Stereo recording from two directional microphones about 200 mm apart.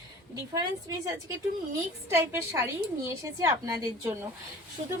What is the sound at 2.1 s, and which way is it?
A woman's voice, 15° right (ahead or behind).